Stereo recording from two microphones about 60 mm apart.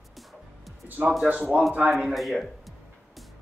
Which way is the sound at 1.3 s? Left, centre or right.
Centre.